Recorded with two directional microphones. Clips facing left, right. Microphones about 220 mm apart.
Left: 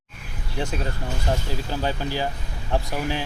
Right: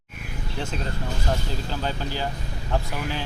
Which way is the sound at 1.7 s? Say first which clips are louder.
Left 4 dB; 15° left (ahead or behind).